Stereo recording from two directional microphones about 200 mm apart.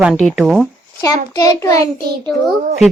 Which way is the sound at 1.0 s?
20° left (ahead or behind).